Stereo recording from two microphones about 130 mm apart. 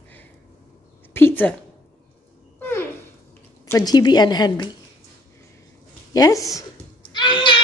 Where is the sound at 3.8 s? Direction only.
30° left (ahead or behind).